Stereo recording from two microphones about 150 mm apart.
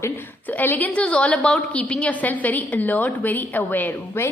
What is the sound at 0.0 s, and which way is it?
A woman's voice, 15° left (ahead or behind).